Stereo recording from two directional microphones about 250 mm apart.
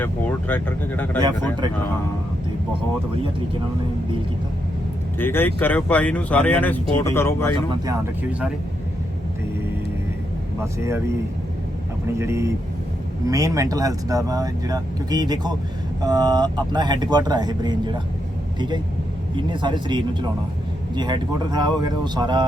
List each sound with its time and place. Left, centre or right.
0.0 s speech: centre
5.2 s speech: centre
10.6 s speech: centre
12.2 s speech: centre
19.4 s speech: centre